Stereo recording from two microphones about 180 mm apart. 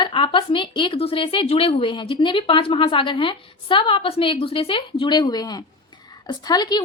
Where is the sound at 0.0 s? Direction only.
30° left (ahead or behind).